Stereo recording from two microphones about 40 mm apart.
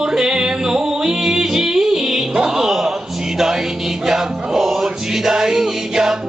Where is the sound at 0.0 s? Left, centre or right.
Centre.